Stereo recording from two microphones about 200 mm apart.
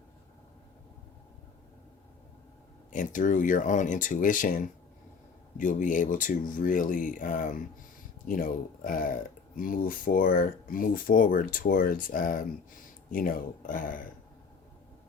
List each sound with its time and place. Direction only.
2.9 s speech: 40° left (ahead or behind)